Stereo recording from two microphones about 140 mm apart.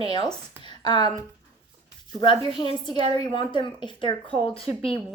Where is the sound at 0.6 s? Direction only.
35° left (ahead or behind).